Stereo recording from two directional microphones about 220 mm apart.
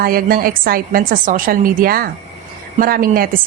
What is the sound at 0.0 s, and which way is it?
A woman's voice, 40° right (ahead or behind).